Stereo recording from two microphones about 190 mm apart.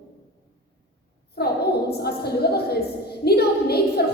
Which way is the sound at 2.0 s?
55° left (ahead or behind).